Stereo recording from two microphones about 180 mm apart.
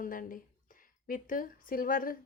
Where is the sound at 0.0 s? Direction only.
50° left (ahead or behind).